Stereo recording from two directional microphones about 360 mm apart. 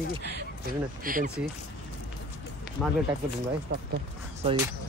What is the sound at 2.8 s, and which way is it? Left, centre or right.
Speech, centre.